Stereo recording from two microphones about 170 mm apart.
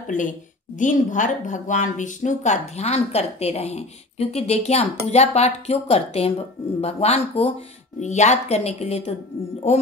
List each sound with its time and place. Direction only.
0.0 s a woman's voice: 50° left (ahead or behind)